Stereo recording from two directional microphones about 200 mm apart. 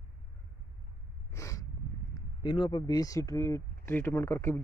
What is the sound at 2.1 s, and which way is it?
A man's voice, 25° left (ahead or behind).